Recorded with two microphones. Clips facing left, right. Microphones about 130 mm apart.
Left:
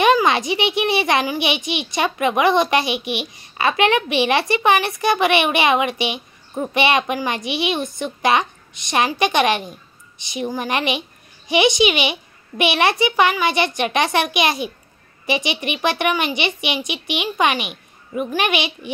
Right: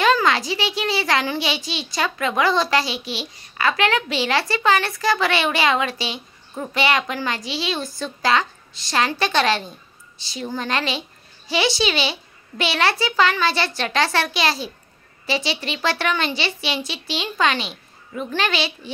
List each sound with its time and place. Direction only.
0.0 s a child's voice: 20° left (ahead or behind)